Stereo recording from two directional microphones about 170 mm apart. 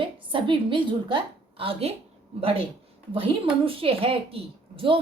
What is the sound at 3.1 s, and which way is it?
A woman's voice, 30° right (ahead or behind).